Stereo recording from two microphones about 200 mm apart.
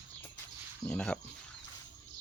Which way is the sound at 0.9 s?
5° left (ahead or behind).